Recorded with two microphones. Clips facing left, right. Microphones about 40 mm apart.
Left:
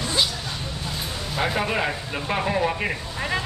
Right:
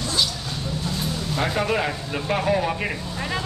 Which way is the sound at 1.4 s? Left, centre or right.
Centre.